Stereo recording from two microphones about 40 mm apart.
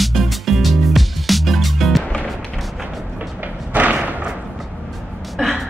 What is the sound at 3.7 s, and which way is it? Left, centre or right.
Thump, right.